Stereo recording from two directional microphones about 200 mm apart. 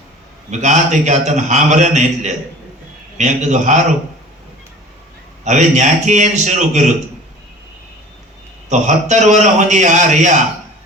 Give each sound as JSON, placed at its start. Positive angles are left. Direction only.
{"t": 0.5, "sound": "a man's voice", "side_deg": -35}
{"t": 5.5, "sound": "a man's voice", "side_deg": -35}
{"t": 8.7, "sound": "a man's voice", "side_deg": -35}